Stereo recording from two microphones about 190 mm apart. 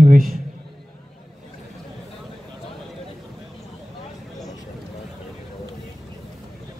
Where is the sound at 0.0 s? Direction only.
45° right (ahead or behind).